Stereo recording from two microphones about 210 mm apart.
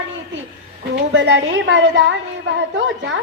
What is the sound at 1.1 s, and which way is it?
A woman's voice, 65° right (ahead or behind).